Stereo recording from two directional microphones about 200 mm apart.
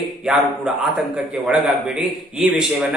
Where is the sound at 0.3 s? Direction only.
Centre (ahead or behind).